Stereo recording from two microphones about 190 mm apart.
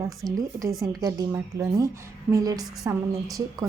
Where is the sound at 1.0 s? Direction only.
15° right (ahead or behind).